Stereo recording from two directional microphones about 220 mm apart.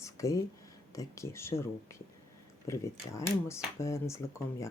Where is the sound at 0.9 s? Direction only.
15° left (ahead or behind).